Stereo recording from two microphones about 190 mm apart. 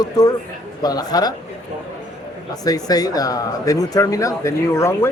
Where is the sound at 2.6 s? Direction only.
20° left (ahead or behind).